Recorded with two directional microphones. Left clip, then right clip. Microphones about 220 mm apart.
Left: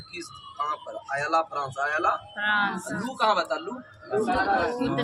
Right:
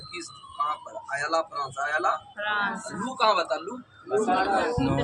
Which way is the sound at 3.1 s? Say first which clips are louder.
Right 1 dB; 5° right (ahead or behind).